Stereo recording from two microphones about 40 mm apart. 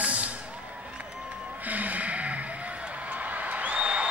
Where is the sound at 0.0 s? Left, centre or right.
Right.